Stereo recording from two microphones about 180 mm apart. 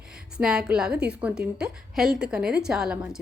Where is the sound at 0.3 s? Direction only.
5° right (ahead or behind).